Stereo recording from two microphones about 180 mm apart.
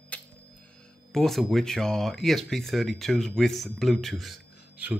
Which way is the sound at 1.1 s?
Centre (ahead or behind).